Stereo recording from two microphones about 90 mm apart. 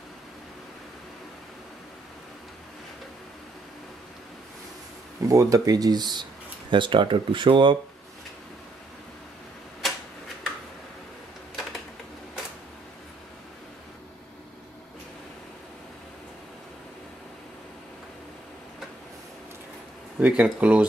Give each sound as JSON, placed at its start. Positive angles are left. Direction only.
{"t": 5.3, "sound": "speech", "side_deg": -40}
{"t": 6.7, "sound": "speech", "side_deg": -65}
{"t": 9.8, "sound": "typewriter", "side_deg": 0}
{"t": 20.2, "sound": "a sound", "side_deg": -15}
{"t": 20.4, "sound": "speech", "side_deg": -15}